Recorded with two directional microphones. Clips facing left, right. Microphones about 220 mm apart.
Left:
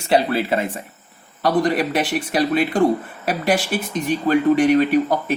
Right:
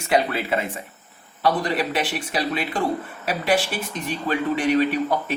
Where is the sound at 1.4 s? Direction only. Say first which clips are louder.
Left 4 dB; 45° left (ahead or behind).